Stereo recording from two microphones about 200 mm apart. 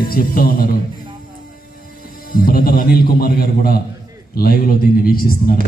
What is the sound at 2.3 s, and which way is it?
A man's voice, 45° left (ahead or behind).